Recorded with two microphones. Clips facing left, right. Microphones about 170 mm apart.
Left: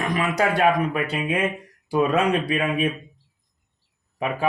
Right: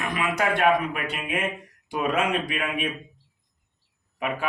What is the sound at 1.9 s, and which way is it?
Speech, 35° left (ahead or behind).